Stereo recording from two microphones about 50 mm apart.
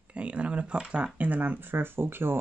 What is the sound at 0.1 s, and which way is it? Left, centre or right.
Speech, right.